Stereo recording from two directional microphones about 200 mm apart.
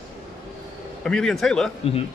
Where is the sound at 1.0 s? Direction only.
5° left (ahead or behind).